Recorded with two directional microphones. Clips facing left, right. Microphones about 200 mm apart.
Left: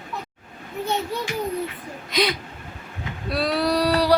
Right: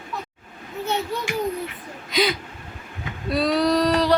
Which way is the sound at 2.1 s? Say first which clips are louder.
Right 1 dB; centre (ahead or behind).